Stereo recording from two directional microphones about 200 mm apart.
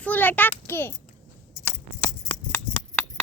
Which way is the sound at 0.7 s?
10° left (ahead or behind).